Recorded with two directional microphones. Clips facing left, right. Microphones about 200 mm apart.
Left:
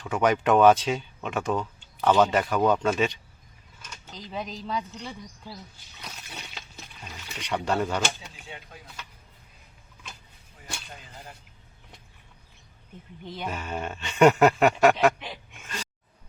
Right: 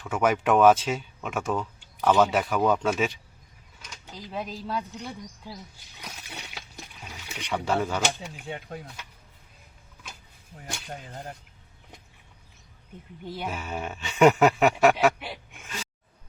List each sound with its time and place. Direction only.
0.0 s speech: 5° right (ahead or behind)
6.0 s a sound: 10° right (ahead or behind)
8.4 s speech: 55° right (ahead or behind)
13.2 s speech: 10° right (ahead or behind)